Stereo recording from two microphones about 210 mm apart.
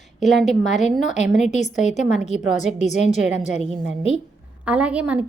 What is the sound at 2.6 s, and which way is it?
Speech, 35° left (ahead or behind).